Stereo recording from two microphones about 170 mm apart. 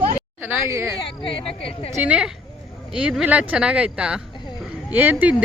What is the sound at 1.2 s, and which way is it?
Speech, 30° left (ahead or behind).